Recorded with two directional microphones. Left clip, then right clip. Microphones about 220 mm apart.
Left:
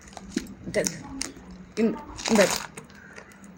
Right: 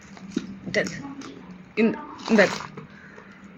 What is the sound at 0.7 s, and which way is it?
Speech, 20° left (ahead or behind).